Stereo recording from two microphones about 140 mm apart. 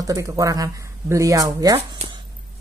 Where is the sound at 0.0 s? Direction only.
25° right (ahead or behind).